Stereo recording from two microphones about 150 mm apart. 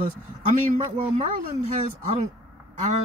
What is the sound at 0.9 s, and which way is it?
Speech, 50° right (ahead or behind).